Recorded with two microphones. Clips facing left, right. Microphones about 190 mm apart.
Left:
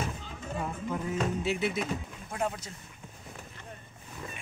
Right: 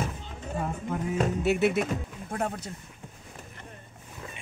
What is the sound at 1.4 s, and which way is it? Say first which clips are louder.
Music: right 6 dB; 70° right (ahead or behind).